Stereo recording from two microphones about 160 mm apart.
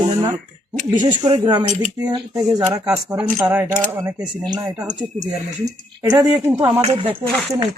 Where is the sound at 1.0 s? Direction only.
30° right (ahead or behind).